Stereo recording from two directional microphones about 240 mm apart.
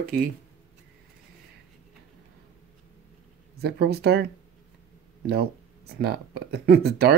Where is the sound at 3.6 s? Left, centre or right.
Right.